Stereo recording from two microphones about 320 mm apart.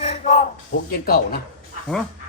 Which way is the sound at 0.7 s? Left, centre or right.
Left.